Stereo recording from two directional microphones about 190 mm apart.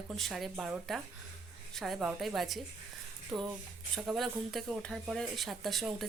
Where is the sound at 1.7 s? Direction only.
Centre (ahead or behind).